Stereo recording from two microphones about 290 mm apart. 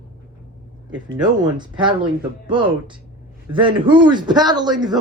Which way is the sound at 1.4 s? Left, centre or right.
Centre.